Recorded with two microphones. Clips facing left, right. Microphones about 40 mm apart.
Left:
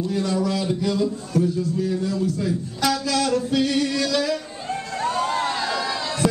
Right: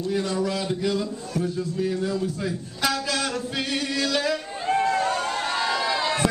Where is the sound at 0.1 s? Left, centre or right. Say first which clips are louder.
Even; centre.